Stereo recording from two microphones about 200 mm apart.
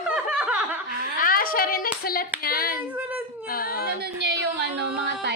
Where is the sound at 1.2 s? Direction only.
45° left (ahead or behind).